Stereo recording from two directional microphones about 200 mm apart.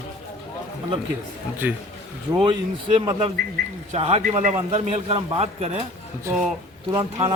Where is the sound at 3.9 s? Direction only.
30° right (ahead or behind).